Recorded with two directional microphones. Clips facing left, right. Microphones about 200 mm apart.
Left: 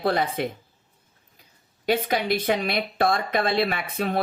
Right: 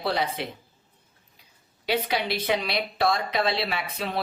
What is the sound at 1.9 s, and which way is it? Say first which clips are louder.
Speech: left 3 dB; 50° left (ahead or behind).